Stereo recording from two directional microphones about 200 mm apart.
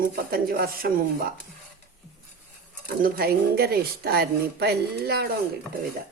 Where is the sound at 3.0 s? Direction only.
50° right (ahead or behind).